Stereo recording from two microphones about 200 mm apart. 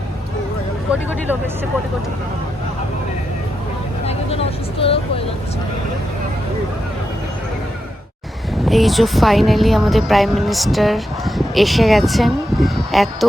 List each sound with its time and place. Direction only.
4.0 s vehicle: 30° left (ahead or behind)
8.6 s speech: centre (ahead or behind)